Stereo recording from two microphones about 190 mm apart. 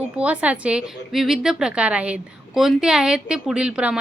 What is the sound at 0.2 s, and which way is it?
A woman's voice, 5° right (ahead or behind).